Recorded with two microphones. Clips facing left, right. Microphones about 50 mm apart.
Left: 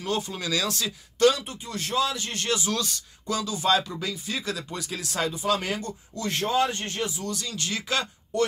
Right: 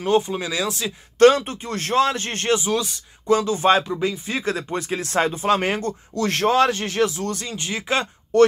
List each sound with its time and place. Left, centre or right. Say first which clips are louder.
0.0 s speech: right 9 dB; right
1.2 s speech: right 7 dB; right
2.6 s speech: right 5 dB; centre
3.3 s speech: right 8 dB; right
6.1 s a man's voice: right 7 dB; right
7.2 s speech: right 5 dB; right
7.5 s speech: right 4 dB; right
8.3 s speech: right 11 dB; right